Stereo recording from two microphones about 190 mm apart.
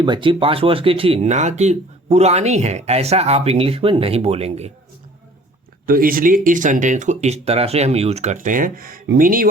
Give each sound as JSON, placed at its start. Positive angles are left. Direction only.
{"t": 0.0, "sound": "speech", "side_deg": -25}
{"t": 5.8, "sound": "speech", "side_deg": -50}